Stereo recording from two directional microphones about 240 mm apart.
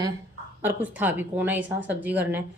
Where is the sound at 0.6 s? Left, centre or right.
Centre.